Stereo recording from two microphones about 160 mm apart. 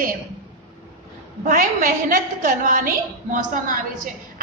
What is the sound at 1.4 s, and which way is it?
A woman's voice, 55° right (ahead or behind).